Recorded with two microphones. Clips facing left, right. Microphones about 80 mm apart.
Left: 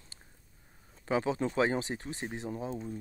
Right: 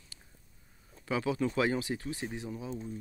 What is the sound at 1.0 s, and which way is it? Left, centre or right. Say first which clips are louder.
Speech: left 1 dB; left.